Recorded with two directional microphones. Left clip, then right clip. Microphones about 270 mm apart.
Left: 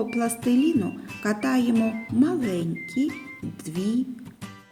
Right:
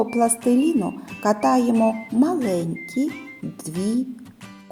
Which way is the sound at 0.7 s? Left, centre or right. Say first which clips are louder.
Right 3 dB; centre.